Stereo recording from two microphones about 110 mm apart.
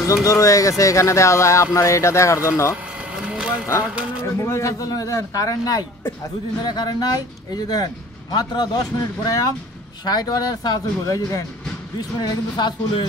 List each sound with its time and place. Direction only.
0.0 s speech: 30° left (ahead or behind)
3.3 s a sound: 10° right (ahead or behind)
3.8 s speech: 10° right (ahead or behind)
4.2 s speech: 25° left (ahead or behind); by 13.0 s 40° left (ahead or behind)